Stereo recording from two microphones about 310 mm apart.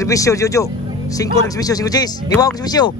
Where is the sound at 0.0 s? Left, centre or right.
Centre.